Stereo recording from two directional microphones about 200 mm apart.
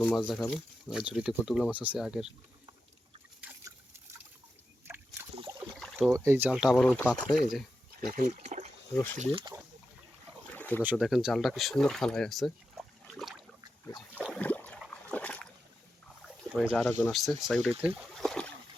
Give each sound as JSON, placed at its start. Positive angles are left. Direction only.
{"t": 0.0, "sound": "speech", "side_deg": 5}
{"t": 0.5, "sound": "speech", "side_deg": -5}
{"t": 3.4, "sound": "a sound", "side_deg": -10}
{"t": 6.0, "sound": "speech", "side_deg": -15}
{"t": 8.1, "sound": "speech", "side_deg": -35}
{"t": 10.5, "sound": "a sound", "side_deg": 10}
{"t": 10.8, "sound": "speech", "side_deg": 0}
{"t": 14.3, "sound": "boat", "side_deg": 5}
{"t": 14.8, "sound": "trickle", "side_deg": 5}
{"t": 16.2, "sound": "speech", "side_deg": 0}
{"t": 17.9, "sound": "trickle", "side_deg": 0}